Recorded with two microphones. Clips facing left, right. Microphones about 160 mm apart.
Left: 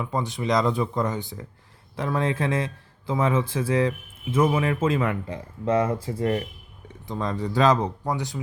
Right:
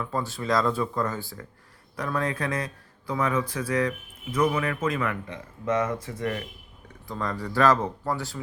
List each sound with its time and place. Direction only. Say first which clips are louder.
0.0 s a man's voice: left 3 dB; 20° left (ahead or behind)